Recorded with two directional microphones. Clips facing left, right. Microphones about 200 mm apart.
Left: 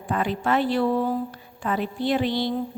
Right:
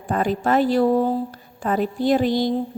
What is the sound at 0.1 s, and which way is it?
A woman's voice, 40° right (ahead or behind).